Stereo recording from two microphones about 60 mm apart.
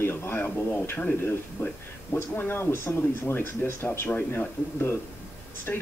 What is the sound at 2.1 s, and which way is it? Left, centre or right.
A man's voice, left.